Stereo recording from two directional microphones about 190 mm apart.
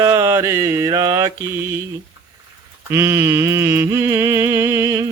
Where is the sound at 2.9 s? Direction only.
10° right (ahead or behind).